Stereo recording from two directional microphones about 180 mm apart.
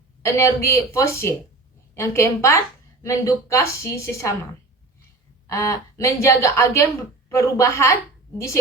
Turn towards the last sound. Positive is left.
turn(degrees=15)  # may be behind; listen again after turning